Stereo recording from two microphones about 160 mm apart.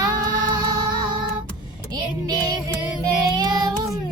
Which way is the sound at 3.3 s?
25° right (ahead or behind).